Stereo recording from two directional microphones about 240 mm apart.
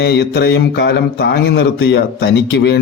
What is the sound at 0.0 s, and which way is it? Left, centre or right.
A man's voice, left.